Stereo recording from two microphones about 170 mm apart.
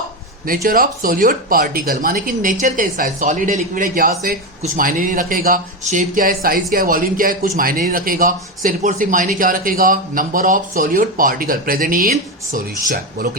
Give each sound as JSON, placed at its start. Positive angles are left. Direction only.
{"t": 0.4, "sound": "a man's voice", "side_deg": -60}